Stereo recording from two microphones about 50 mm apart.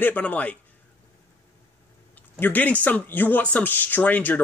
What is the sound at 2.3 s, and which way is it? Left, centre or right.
Speech, left.